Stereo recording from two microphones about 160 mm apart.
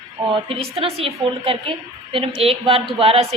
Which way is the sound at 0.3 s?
35° right (ahead or behind).